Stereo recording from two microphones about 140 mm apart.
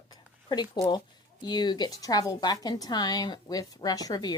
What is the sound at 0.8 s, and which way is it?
Speech, 30° left (ahead or behind).